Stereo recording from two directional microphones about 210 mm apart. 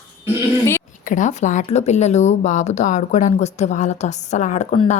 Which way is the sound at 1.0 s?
35° left (ahead or behind).